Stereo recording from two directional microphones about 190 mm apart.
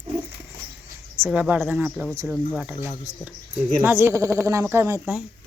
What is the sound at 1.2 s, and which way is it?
Speech, 10° right (ahead or behind).